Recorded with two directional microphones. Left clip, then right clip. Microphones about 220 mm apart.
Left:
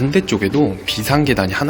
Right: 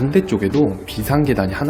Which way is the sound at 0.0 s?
Centre (ahead or behind).